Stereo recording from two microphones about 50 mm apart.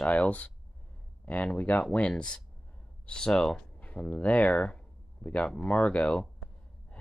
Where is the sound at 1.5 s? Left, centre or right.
Left.